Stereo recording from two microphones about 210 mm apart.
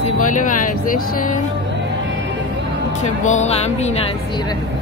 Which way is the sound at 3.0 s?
35° left (ahead or behind).